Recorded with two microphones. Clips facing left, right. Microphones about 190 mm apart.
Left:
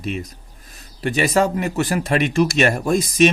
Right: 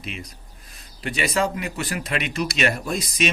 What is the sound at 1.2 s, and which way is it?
A man's voice, 45° left (ahead or behind).